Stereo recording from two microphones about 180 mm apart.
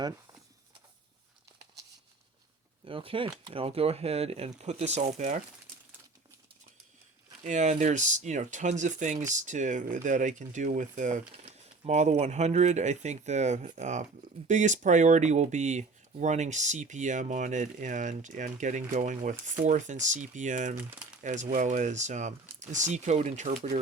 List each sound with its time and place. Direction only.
2.8 s speech: 30° right (ahead or behind)
7.4 s speech: 40° right (ahead or behind)